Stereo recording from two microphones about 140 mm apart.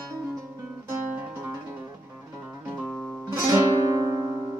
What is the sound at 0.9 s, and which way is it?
Music, 15° right (ahead or behind).